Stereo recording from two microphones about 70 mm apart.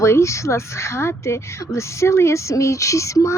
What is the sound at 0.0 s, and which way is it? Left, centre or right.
Speech, left.